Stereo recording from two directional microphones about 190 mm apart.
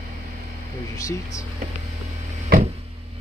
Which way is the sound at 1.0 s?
15° left (ahead or behind).